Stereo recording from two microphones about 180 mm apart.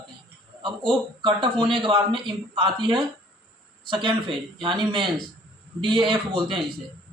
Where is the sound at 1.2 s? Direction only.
25° right (ahead or behind).